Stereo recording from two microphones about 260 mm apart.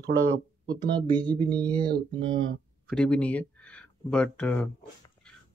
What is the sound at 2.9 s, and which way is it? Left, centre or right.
Speech, centre.